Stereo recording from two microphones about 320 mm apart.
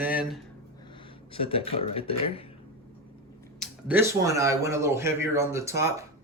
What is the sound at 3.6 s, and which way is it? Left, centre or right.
Speech, centre.